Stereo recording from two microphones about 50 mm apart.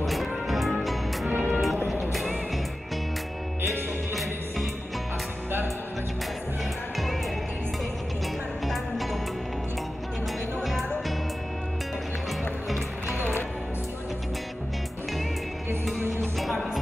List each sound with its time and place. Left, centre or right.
0.0 s music: centre
1.3 s music: right
2.1 s music: centre
4.1 s music: centre
8.6 s music: centre
10.6 s music: centre
16.2 s music: centre